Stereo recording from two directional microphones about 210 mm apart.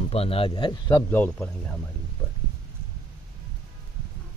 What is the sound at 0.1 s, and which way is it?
Speech, 30° left (ahead or behind).